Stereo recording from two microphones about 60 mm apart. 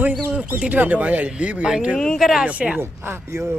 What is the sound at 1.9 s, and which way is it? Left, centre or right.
Speech, centre.